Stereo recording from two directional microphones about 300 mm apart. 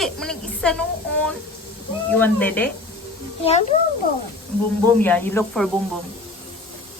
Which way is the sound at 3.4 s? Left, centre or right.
Left.